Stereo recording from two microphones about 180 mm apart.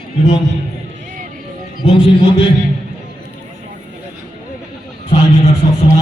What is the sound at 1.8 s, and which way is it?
Speech, 25° left (ahead or behind).